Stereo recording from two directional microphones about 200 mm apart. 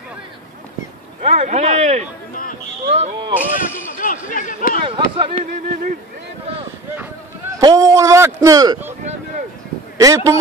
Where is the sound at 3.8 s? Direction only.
40° left (ahead or behind).